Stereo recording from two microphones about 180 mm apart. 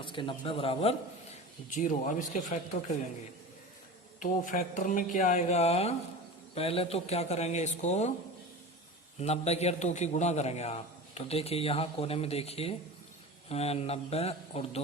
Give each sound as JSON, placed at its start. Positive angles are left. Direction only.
{"t": 0.0, "sound": "a man's voice", "side_deg": 25}
{"t": 1.7, "sound": "speech", "side_deg": 45}
{"t": 4.2, "sound": "a man's voice", "side_deg": 45}
{"t": 9.1, "sound": "a man's voice", "side_deg": 35}